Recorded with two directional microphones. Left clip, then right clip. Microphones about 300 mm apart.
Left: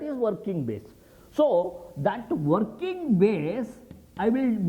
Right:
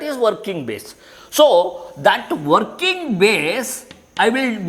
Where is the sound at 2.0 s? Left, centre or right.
Centre.